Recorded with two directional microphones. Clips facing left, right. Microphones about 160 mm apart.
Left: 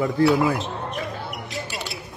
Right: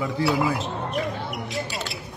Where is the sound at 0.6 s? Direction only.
Centre (ahead or behind).